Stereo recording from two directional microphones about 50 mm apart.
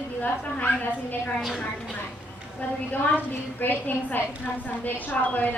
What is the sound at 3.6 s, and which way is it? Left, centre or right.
A woman's voice, left.